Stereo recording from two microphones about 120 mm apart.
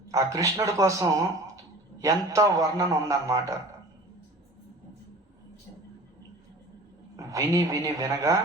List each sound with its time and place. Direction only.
0.1 s a man's voice: 25° right (ahead or behind)
7.2 s a man's voice: 30° right (ahead or behind)